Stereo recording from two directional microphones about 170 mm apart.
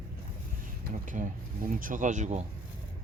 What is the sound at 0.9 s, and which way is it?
Speech, 50° right (ahead or behind).